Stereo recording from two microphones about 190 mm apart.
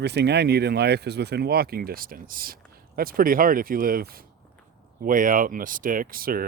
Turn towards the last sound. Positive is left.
turn(degrees=-50)  # may be behind; listen again after turning